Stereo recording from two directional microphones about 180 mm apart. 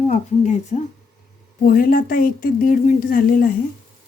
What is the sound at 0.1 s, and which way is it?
Speech, 40° left (ahead or behind).